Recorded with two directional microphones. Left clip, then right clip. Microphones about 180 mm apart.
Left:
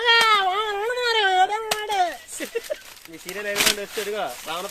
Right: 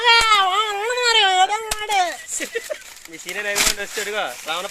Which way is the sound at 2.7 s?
15° right (ahead or behind).